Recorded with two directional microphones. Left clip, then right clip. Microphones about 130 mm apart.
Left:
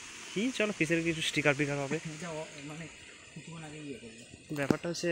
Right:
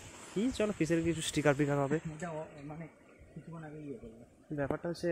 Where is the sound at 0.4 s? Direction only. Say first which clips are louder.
Left 2 dB; 15° right (ahead or behind).